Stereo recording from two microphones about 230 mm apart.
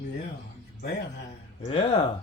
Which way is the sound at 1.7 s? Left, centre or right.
Left.